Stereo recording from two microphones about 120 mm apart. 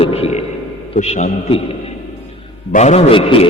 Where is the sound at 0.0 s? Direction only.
60° left (ahead or behind).